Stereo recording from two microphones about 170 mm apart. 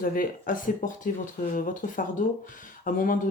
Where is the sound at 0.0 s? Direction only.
55° left (ahead or behind).